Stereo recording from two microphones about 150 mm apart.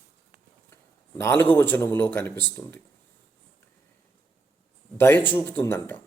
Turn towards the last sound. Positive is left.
turn(degrees=15)  # may be behind; listen again after turning